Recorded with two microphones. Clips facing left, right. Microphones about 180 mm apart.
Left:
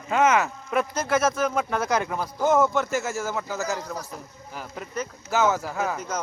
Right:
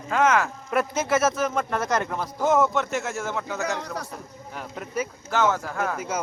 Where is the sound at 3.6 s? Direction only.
70° right (ahead or behind).